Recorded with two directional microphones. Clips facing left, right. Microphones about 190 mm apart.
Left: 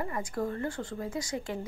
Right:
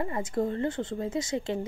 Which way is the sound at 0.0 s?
25° right (ahead or behind).